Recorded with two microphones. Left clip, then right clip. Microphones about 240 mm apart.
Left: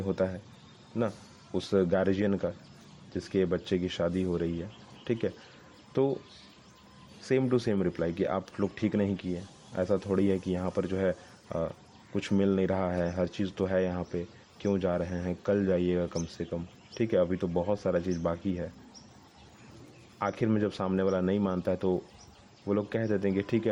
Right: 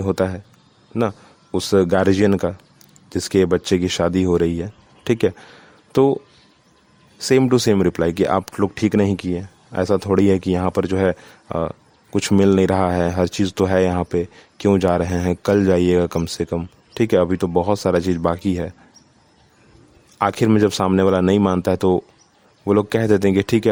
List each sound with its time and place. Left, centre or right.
0.0 s speech: right
7.2 s speech: right
20.1 s speech: right